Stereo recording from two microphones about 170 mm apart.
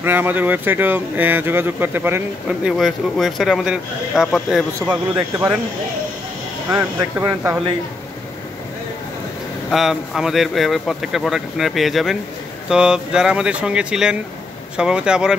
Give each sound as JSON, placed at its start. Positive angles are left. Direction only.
{"t": 0.0, "sound": "speech", "side_deg": -10}
{"t": 2.8, "sound": "speech", "side_deg": 0}
{"t": 6.7, "sound": "speech", "side_deg": -15}
{"t": 9.7, "sound": "speech", "side_deg": 0}